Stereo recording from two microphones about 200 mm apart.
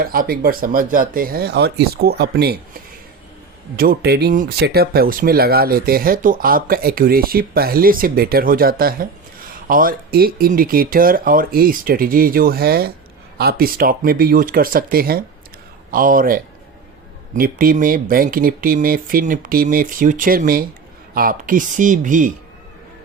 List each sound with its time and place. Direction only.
0.0 s speech: 45° right (ahead or behind)
3.8 s speech: 50° right (ahead or behind)